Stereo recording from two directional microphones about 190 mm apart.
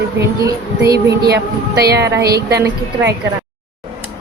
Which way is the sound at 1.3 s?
55° right (ahead or behind).